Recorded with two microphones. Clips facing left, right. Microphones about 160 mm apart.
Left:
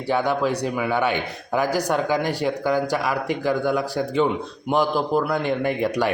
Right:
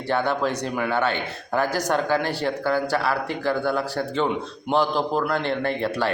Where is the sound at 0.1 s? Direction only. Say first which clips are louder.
Left 2 dB; 10° left (ahead or behind).